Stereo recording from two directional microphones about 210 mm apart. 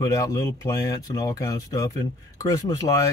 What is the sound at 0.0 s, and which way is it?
Speech, 15° left (ahead or behind).